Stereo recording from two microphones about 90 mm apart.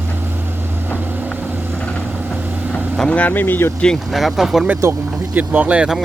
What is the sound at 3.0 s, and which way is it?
Speech, 15° left (ahead or behind).